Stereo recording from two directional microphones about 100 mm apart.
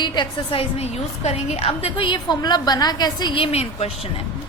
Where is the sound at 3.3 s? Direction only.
80° left.